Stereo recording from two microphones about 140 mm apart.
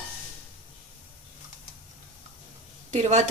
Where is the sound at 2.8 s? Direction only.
55° right (ahead or behind).